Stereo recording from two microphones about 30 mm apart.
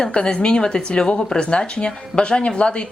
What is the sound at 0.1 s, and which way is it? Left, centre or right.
Speech, left.